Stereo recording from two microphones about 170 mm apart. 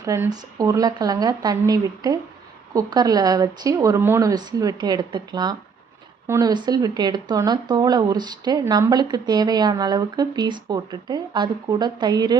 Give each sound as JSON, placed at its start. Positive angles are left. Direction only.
{"t": 0.0, "sound": "speech", "side_deg": -20}